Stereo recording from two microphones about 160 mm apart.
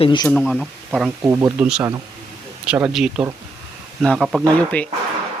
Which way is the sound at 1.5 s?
5° right (ahead or behind).